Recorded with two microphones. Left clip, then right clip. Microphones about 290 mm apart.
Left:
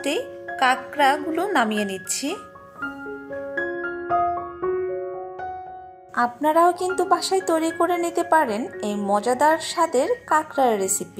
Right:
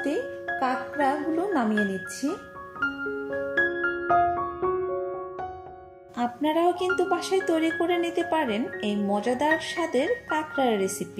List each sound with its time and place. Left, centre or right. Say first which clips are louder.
0.6 s speech: left 7 dB; left
3.5 s music: right 2 dB; centre
6.1 s speech: left 7 dB; left